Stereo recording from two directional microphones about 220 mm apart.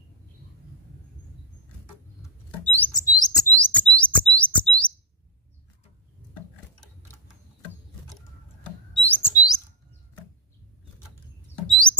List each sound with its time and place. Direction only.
2.6 s chirp: 5° left (ahead or behind)
9.0 s bird: 10° left (ahead or behind)